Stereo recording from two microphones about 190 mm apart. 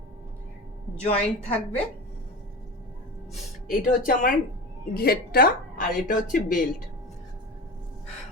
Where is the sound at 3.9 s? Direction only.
45° left (ahead or behind).